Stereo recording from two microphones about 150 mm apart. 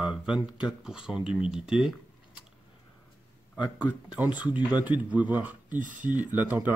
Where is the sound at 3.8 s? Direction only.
10° right (ahead or behind).